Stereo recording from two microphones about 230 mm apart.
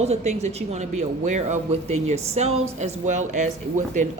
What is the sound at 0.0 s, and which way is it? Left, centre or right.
Speech, right.